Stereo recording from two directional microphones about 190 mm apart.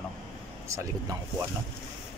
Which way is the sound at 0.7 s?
15° right (ahead or behind).